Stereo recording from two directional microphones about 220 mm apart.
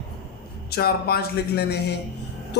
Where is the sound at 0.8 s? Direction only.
45° left (ahead or behind).